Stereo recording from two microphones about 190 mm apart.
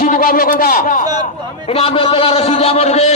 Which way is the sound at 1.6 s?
30° left (ahead or behind).